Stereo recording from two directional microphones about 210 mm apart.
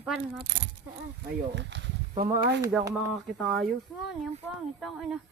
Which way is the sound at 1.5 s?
55° right (ahead or behind).